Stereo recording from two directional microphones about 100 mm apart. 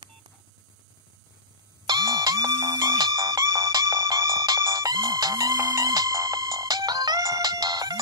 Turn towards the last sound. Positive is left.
turn(degrees=-40)  # may be behind; listen again after turning